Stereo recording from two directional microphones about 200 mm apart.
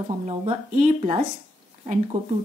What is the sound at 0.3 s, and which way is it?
Speech, 35° right (ahead or behind).